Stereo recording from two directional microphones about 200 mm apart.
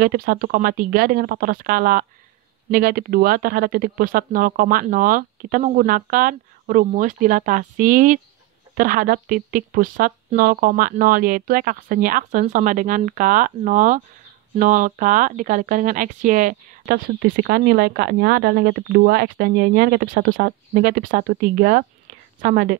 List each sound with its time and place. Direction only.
0.0 s speech: 45° right (ahead or behind)